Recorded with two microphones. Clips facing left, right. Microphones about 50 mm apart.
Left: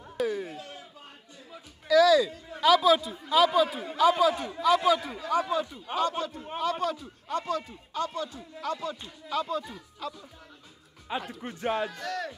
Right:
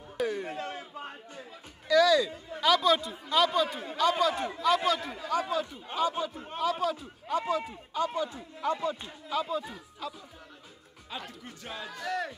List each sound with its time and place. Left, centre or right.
0.2 s a man's voice: centre
0.5 s a sound: right
1.5 s a man's voice: centre
6.0 s a man's voice: centre
9.3 s speech: centre
11.1 s speech: centre
11.4 s a man's voice: left
12.0 s a man's voice: centre